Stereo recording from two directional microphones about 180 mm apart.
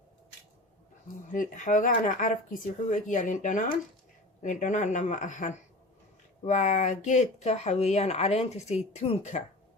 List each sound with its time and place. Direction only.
1.3 s speech: 50° left (ahead or behind)